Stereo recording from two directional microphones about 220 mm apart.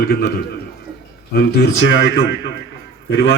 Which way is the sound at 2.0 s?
50° left (ahead or behind).